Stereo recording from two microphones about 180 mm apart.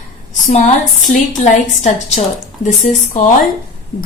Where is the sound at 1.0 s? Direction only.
45° left (ahead or behind).